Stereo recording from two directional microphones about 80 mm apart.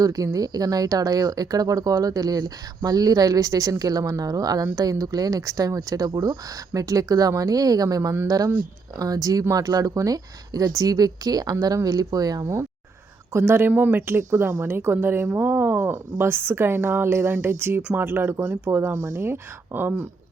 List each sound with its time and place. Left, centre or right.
0.0 s speech: right
6.1 s speech: right
6.7 s speech: right
13.3 s speech: right
18.3 s speech: right